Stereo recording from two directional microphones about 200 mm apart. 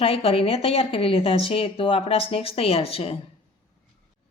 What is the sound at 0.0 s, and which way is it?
Speech, 30° left (ahead or behind).